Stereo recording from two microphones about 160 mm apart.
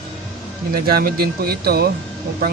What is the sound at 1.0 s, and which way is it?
Speech, 70° right (ahead or behind).